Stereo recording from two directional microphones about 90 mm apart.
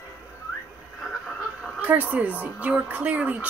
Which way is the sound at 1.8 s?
15° right (ahead or behind).